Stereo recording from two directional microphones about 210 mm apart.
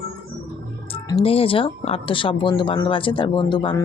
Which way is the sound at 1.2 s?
25° left (ahead or behind).